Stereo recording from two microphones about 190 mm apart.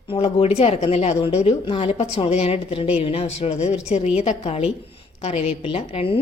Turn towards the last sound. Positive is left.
turn(degrees=30)  # may be behind; listen again after turning